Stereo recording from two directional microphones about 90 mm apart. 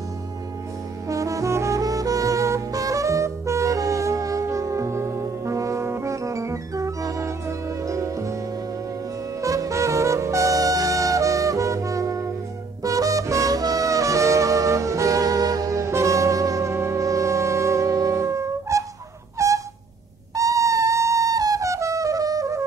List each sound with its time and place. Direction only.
1.0 s brass instrument: 40° right (ahead or behind)
9.4 s music: 40° right (ahead or behind)
19.3 s a sound: 35° right (ahead or behind)
20.3 s music: 40° right (ahead or behind)